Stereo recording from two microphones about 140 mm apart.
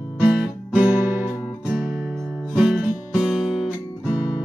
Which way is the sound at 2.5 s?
5° right (ahead or behind).